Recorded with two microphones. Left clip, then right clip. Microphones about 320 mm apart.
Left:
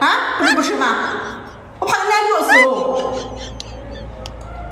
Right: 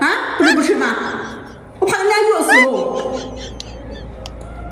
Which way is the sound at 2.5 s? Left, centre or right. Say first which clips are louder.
Even; centre.